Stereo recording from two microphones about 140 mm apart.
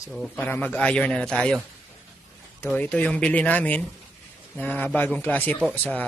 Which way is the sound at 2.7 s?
10° left (ahead or behind).